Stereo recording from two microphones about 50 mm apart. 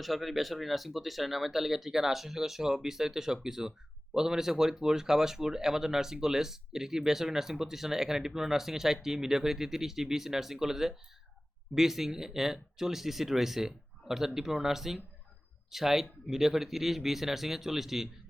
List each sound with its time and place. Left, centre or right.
0.0 s speech: centre